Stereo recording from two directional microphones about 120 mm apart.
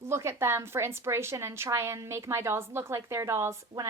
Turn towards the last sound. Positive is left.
turn(degrees=-25)  # may be behind; listen again after turning